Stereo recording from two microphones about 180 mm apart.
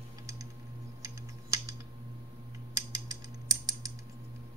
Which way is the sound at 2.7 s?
20° right (ahead or behind).